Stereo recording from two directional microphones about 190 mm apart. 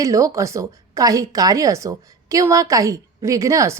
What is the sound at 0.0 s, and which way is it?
A woman's voice, 15° right (ahead or behind).